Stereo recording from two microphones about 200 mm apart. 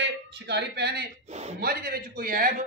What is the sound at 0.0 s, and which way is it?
A man's voice, 60° right (ahead or behind).